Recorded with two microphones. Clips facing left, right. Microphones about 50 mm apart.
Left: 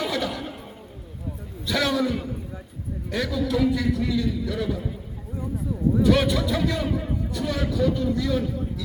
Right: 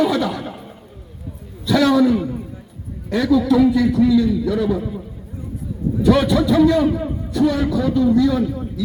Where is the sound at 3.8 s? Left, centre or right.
Right.